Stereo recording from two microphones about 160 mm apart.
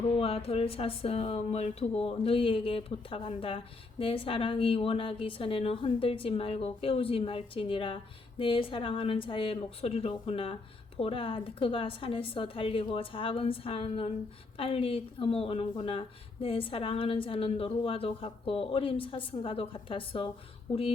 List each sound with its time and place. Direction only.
0.2 s speech: 35° left (ahead or behind)